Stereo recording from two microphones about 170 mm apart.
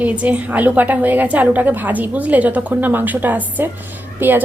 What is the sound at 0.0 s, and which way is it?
A woman's voice, 10° right (ahead or behind).